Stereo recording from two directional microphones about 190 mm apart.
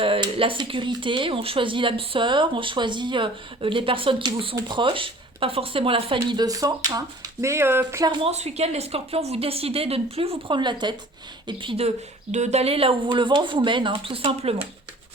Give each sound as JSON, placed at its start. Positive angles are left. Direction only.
{"t": 0.0, "sound": "speech", "side_deg": -30}
{"t": 8.3, "sound": "a woman's voice", "side_deg": -35}